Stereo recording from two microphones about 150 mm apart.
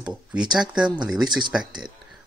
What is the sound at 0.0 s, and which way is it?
Speech, 5° right (ahead or behind).